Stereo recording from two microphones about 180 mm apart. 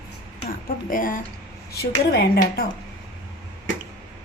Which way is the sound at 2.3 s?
55° left (ahead or behind).